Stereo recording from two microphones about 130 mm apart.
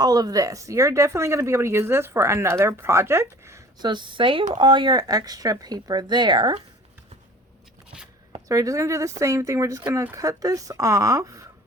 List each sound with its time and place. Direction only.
0.0 s speech: 30° right (ahead or behind)
3.8 s speech: 35° right (ahead or behind)
8.4 s speech: 25° right (ahead or behind)